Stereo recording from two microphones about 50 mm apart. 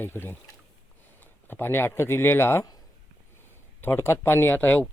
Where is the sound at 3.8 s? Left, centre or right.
Left.